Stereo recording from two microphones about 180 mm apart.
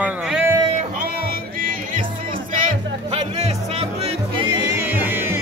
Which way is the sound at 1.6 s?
50° right (ahead or behind).